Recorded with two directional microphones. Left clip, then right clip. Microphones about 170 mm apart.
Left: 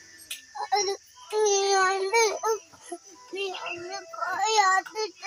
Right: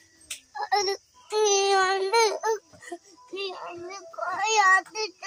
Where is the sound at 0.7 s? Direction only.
30° right (ahead or behind).